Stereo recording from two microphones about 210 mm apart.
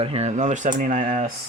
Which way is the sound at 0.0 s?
30° right (ahead or behind).